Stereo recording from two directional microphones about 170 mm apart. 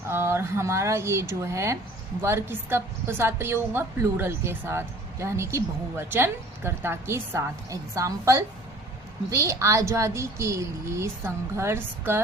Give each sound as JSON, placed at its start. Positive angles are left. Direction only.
{"t": 0.1, "sound": "a woman's voice", "side_deg": -15}